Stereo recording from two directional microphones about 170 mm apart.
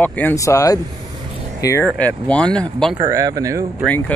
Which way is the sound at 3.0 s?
20° right (ahead or behind).